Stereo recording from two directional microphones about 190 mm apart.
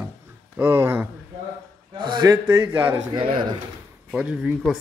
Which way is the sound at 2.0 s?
25° right (ahead or behind).